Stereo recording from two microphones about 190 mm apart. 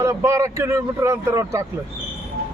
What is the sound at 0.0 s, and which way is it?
Speech, 15° right (ahead or behind).